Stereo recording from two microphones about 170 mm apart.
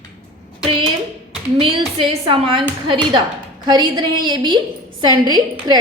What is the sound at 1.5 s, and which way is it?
A woman's voice, 30° right (ahead or behind).